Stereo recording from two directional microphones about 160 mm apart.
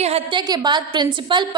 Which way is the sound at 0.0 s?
40° right (ahead or behind).